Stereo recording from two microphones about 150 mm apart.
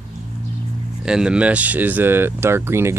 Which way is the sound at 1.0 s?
5° right (ahead or behind).